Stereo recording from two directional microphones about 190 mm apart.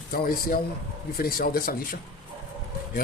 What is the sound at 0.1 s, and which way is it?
Speech, 50° left (ahead or behind).